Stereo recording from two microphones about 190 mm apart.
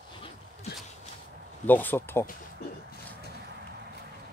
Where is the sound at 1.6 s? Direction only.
10° left (ahead or behind).